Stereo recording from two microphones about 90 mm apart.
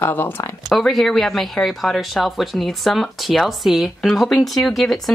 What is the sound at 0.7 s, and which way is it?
Speech, centre (ahead or behind).